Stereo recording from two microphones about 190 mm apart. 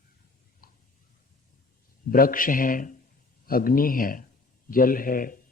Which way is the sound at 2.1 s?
50° left (ahead or behind).